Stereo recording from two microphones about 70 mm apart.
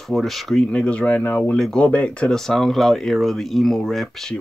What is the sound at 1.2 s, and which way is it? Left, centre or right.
Speech, left.